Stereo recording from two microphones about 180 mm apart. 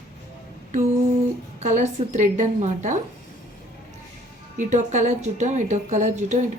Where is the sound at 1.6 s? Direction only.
40° right (ahead or behind).